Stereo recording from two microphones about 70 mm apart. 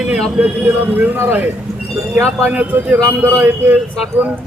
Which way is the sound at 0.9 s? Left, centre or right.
Right.